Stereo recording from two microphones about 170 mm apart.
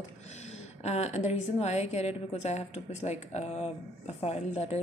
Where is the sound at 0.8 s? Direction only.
40° left (ahead or behind).